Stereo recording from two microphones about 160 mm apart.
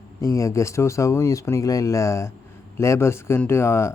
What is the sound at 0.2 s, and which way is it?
Speech, 20° left (ahead or behind).